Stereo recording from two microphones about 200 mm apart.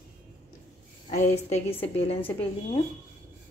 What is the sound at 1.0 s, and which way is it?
A woman's voice, 35° left (ahead or behind).